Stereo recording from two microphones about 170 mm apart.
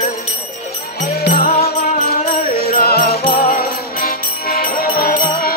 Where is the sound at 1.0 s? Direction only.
65° left (ahead or behind).